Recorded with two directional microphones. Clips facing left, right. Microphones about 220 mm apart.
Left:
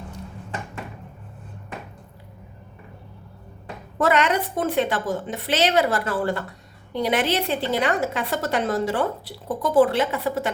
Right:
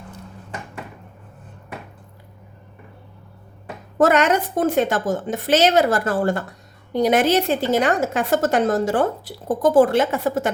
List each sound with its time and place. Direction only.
3.9 s a woman's voice: 45° right (ahead or behind)